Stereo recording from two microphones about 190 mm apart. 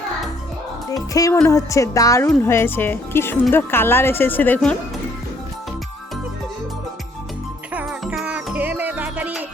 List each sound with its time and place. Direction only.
0.9 s speech: 20° left (ahead or behind)
7.7 s music: 5° right (ahead or behind)